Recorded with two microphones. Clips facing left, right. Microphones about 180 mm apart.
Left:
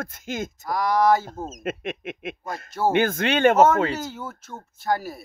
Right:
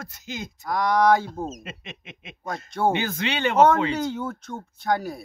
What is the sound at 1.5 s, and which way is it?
Speech, 50° left (ahead or behind).